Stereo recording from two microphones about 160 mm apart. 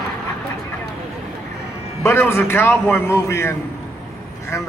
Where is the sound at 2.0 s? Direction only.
15° left (ahead or behind).